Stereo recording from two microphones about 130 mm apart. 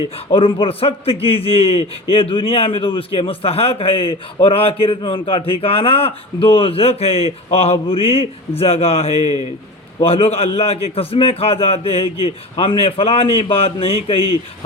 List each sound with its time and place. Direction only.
0.3 s a man's voice: 45° left (ahead or behind)